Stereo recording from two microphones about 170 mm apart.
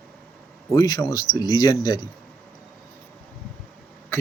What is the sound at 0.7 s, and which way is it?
Speech, 20° left (ahead or behind).